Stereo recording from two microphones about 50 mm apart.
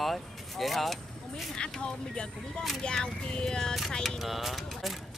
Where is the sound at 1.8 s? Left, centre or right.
Centre.